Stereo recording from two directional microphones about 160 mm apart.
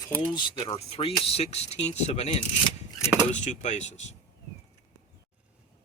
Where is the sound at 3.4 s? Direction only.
50° left (ahead or behind).